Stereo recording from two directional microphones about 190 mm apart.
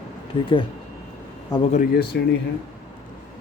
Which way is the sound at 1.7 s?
50° left (ahead or behind).